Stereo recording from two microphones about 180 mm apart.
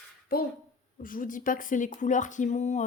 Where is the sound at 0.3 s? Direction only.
55° left (ahead or behind).